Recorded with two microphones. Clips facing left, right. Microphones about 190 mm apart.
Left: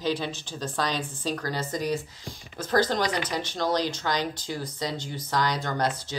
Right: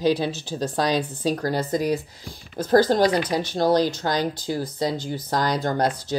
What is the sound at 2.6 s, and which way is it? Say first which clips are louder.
Speech: right 7 dB; 35° right (ahead or behind).